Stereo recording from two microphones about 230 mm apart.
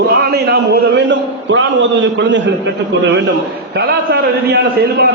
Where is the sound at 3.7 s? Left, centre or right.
Right.